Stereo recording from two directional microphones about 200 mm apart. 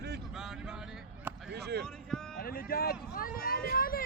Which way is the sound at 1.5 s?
55° right (ahead or behind).